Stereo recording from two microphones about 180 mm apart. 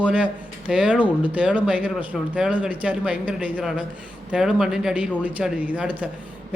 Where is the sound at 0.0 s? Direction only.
5° right (ahead or behind).